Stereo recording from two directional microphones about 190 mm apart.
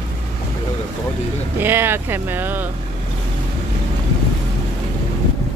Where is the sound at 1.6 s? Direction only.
10° right (ahead or behind).